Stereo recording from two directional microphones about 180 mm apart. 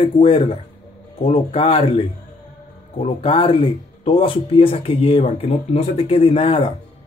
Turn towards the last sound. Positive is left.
turn(degrees=30)  # may be behind; listen again after turning